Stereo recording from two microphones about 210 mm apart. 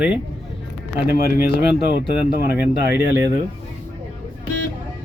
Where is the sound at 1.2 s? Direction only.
45° left (ahead or behind).